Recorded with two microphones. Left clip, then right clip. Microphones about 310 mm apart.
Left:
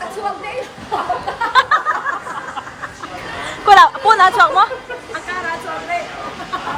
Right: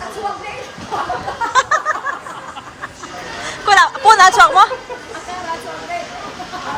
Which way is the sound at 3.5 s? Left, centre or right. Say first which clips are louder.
Left 3 dB; centre.